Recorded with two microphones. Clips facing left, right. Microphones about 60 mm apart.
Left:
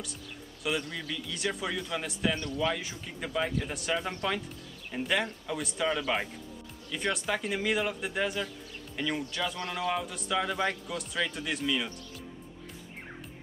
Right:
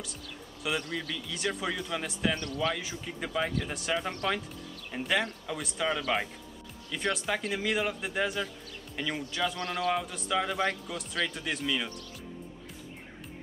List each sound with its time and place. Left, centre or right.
0.7 s speech: centre
2.3 s speech: centre
2.6 s speech: centre